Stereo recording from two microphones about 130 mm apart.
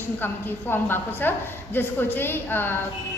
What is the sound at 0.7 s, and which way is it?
A woman's voice, 15° left (ahead or behind).